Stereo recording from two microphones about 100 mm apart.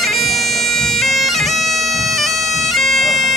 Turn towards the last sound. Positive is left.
turn(degrees=0)  # may be behind; listen again after turning